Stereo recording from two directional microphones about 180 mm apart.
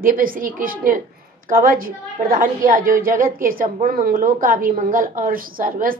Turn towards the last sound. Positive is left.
turn(degrees=-50)  # may be behind; listen again after turning